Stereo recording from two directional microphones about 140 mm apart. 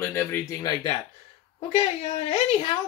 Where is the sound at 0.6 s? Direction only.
30° left (ahead or behind).